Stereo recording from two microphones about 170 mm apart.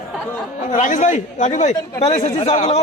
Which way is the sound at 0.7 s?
50° left (ahead or behind).